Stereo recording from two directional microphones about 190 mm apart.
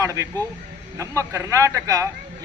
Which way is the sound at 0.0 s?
15° right (ahead or behind).